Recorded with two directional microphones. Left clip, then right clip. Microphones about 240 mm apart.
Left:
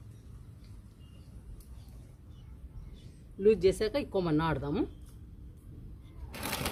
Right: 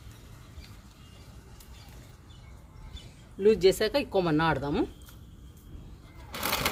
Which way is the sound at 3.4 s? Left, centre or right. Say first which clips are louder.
Right 3 dB; centre.